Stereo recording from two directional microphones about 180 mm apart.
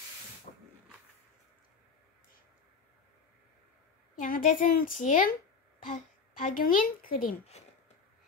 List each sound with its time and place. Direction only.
0.5 s hiss: 40° left (ahead or behind)
4.2 s a woman's voice: 50° left (ahead or behind)
6.4 s a woman's voice: 50° left (ahead or behind)